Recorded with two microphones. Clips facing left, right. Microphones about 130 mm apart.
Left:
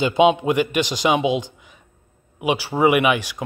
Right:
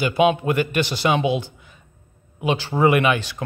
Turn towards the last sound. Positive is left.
turn(degrees=15)  # may be behind; listen again after turning